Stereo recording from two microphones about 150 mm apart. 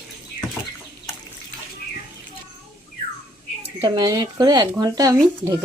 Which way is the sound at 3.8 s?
30° right (ahead or behind).